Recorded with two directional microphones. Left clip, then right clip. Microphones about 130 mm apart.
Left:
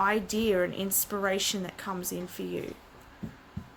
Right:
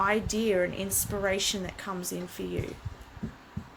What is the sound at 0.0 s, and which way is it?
A woman's voice, 35° left (ahead or behind).